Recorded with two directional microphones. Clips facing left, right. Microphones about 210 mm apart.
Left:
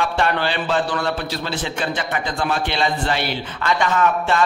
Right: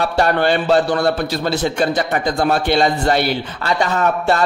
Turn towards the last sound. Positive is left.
turn(degrees=-40)  # may be behind; listen again after turning